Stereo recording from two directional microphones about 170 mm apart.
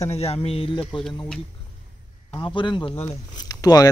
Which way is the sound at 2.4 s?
30° left (ahead or behind).